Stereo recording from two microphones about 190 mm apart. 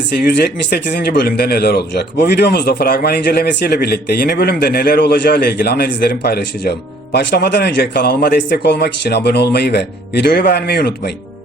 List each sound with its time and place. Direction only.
0.2 s speech: 60° left (ahead or behind)